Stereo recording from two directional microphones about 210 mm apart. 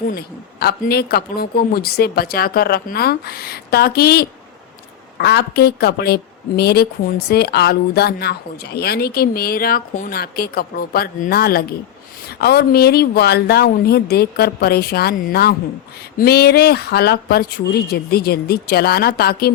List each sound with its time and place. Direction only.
0.1 s speech: 45° left (ahead or behind)